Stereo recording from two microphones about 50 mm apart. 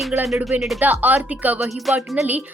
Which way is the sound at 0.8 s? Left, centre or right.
Right.